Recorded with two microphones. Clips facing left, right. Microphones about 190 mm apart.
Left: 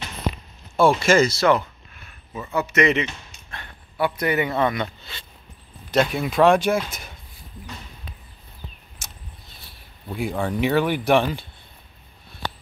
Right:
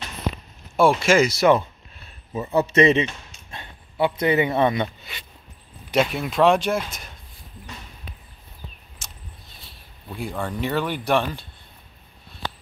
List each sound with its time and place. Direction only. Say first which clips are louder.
0.7 s speech: even; 5° right (ahead or behind)
2.0 s speech: right 5 dB; 30° right (ahead or behind)
5.9 s speech: left 1 dB; 5° right (ahead or behind)
10.0 s speech: left 4 dB; 10° left (ahead or behind)